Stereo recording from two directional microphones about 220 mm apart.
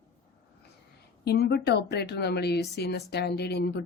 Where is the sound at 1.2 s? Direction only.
50° left (ahead or behind).